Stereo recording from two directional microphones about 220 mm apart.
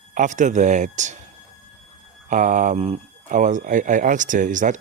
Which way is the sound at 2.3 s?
35° right (ahead or behind).